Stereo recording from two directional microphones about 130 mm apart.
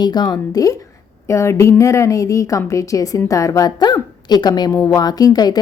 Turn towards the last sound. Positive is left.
turn(degrees=30)  # may be behind; listen again after turning